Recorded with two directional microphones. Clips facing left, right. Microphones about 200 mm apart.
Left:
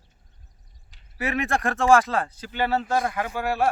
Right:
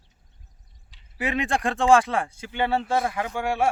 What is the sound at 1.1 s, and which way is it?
Speech, 15° right (ahead or behind).